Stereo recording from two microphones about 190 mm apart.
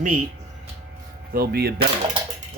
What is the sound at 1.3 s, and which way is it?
Speech, 55° right (ahead or behind).